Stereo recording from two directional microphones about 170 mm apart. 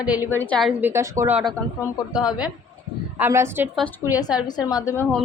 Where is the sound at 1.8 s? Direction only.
25° left (ahead or behind).